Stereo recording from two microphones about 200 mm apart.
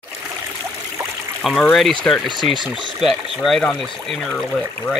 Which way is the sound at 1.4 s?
5° left (ahead or behind).